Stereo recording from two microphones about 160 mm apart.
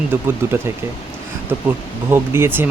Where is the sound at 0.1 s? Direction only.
15° right (ahead or behind).